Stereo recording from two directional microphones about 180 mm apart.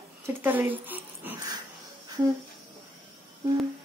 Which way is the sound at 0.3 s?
10° right (ahead or behind).